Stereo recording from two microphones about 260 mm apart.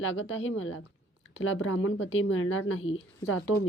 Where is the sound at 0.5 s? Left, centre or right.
Left.